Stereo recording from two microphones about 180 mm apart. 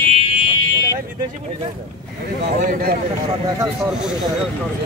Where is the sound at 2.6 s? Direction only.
50° right (ahead or behind).